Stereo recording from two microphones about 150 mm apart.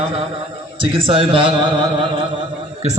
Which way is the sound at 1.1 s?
35° right (ahead or behind).